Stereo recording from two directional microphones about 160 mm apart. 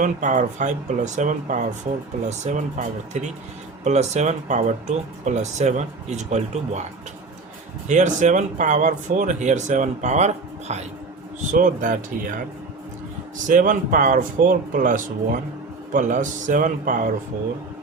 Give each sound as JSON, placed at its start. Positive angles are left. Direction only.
{"t": 0.0, "sound": "speech", "side_deg": -50}
{"t": 7.9, "sound": "speech", "side_deg": -50}
{"t": 11.5, "sound": "speech", "side_deg": -55}
{"t": 13.5, "sound": "speech", "side_deg": -55}